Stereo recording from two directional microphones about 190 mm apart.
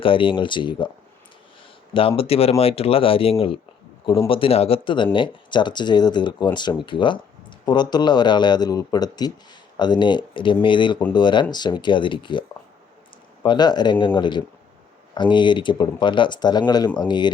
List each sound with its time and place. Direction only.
0.0 s speech: 25° left (ahead or behind)
1.9 s speech: 30° left (ahead or behind)